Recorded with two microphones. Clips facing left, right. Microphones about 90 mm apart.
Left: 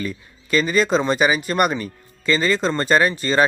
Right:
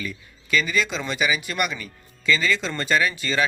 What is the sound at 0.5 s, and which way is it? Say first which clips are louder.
Speech: left 6 dB; 40° left (ahead or behind).